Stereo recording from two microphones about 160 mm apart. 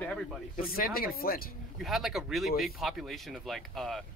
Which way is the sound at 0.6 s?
65° left (ahead or behind).